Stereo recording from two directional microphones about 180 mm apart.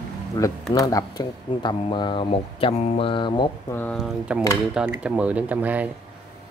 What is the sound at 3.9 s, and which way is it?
Speech, 5° right (ahead or behind).